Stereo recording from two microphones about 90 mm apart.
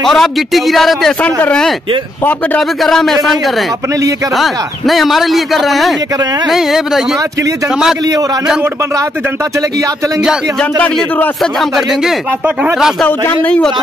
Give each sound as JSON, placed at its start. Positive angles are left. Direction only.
{"t": 0.1, "sound": "speech", "side_deg": 0}
{"t": 1.2, "sound": "speech", "side_deg": 10}
{"t": 2.8, "sound": "speech", "side_deg": 5}
{"t": 11.7, "sound": "speech", "side_deg": -5}
{"t": 13.3, "sound": "speech", "side_deg": 15}